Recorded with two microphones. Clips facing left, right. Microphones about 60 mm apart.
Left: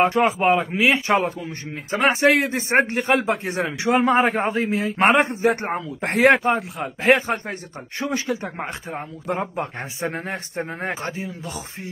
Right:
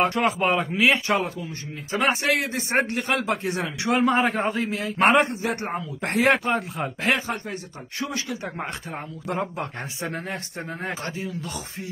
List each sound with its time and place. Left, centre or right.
0.0 s a man's voice: left
1.0 s a man's voice: left